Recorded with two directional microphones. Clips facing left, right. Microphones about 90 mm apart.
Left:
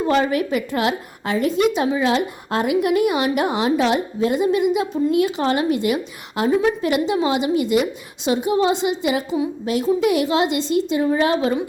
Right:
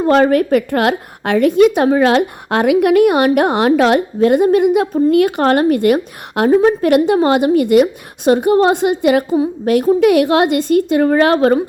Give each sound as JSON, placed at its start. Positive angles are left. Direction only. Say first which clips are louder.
{"t": 0.0, "sound": "a woman's voice", "louder": "right 7 dB", "side_deg": -50}